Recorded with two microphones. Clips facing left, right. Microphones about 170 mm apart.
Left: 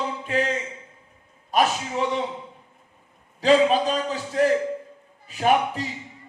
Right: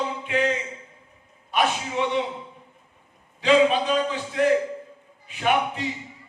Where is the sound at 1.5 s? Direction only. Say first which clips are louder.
Left 2 dB; 40° left (ahead or behind).